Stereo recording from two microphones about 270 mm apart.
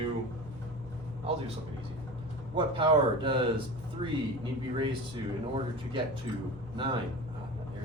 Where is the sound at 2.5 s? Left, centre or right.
Centre.